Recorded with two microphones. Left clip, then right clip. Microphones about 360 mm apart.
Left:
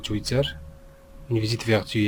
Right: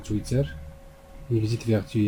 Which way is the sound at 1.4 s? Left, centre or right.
Left.